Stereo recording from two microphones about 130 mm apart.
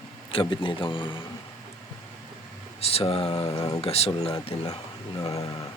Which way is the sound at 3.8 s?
50° left (ahead or behind).